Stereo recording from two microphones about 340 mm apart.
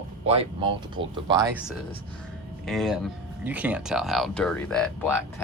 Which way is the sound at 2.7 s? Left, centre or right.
Centre.